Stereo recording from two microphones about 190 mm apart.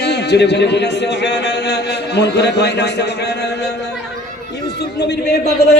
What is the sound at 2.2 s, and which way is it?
Speech, 60° left (ahead or behind).